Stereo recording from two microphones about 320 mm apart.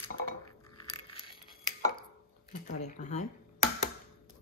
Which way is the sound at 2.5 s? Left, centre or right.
Left.